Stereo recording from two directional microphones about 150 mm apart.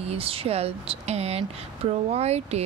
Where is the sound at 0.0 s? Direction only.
40° right (ahead or behind).